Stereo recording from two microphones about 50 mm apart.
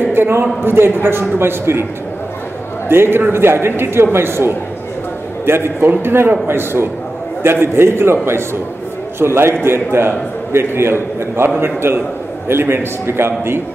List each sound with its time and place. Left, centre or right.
0.0 s a man's voice: right
2.9 s a man's voice: right